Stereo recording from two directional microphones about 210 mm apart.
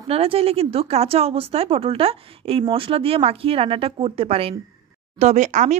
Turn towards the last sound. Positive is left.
turn(degrees=-35)  # may be behind; listen again after turning